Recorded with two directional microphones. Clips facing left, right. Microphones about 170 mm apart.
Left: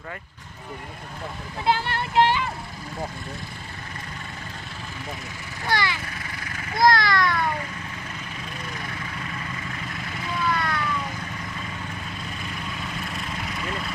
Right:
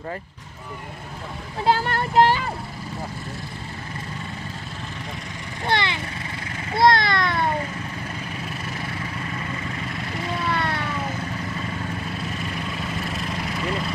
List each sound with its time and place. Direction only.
1.6 s speech: 40° right (ahead or behind)
5.7 s speech: 25° right (ahead or behind)
6.5 s vehicle: 25° right (ahead or behind)
10.4 s vehicle: 30° right (ahead or behind)